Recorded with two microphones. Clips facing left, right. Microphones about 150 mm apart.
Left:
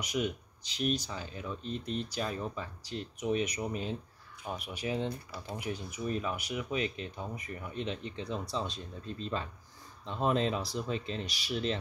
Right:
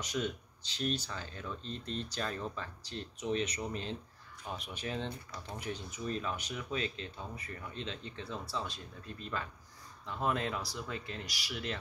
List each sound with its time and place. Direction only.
0.0 s speech: 15° left (ahead or behind)